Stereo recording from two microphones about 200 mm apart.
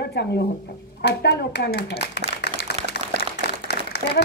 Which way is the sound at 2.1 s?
55° left (ahead or behind).